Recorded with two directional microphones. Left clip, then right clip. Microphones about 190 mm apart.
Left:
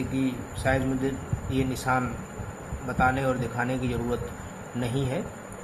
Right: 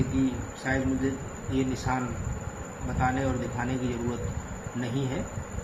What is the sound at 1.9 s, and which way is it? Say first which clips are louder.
Speech: left 4 dB; 45° left (ahead or behind).